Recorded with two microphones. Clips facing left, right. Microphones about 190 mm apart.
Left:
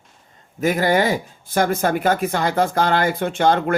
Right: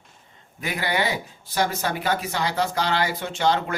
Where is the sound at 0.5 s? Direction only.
45° left (ahead or behind).